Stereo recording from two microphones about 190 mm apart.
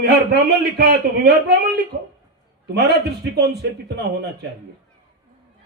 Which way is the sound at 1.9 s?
70° right (ahead or behind).